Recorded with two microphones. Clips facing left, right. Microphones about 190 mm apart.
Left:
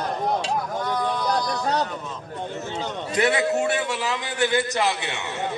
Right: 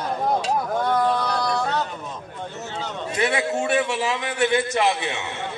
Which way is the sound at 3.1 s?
25° right (ahead or behind).